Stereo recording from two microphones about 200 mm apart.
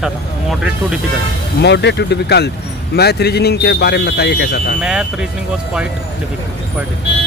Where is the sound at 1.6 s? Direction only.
60° left (ahead or behind).